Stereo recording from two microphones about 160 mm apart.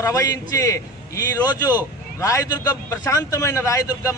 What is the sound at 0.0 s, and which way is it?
A man's voice, 20° left (ahead or behind).